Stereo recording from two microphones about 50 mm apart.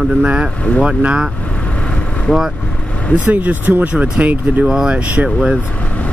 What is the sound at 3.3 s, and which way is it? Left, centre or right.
Speech, right.